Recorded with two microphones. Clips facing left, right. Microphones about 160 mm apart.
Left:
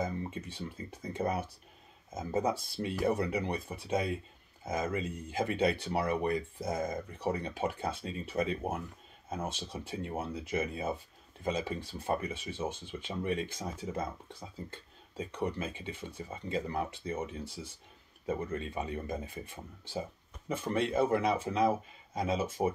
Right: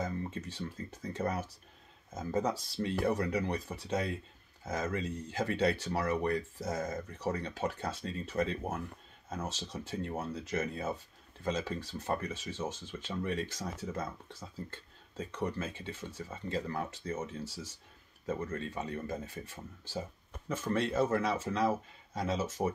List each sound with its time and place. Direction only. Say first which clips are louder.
0.0 s speech: left 1 dB; 10° left (ahead or behind)
12.6 s speech: left 3 dB; 60° left (ahead or behind)
12.9 s speech: left 1 dB; 15° left (ahead or behind)
19.9 s a sound: left 2 dB; 10° left (ahead or behind)
20.7 s speech: left 1 dB; 10° left (ahead or behind)